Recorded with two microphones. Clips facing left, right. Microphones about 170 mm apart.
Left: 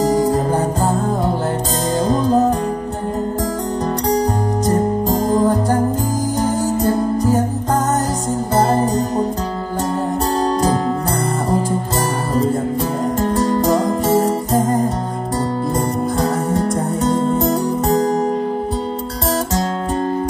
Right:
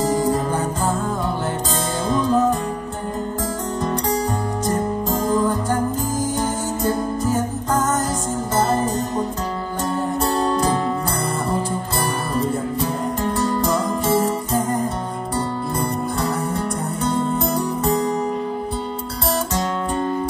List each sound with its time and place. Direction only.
0.0 s music: 40° left (ahead or behind)
4.6 s music: 40° left (ahead or behind)
10.4 s music: 40° left (ahead or behind)
13.2 s music: 40° left (ahead or behind)
16.2 s music: 40° left (ahead or behind)